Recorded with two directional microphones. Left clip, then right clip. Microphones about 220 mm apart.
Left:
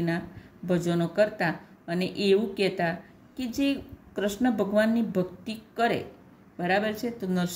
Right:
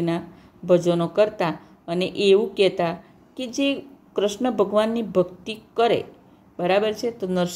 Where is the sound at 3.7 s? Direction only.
20° right (ahead or behind).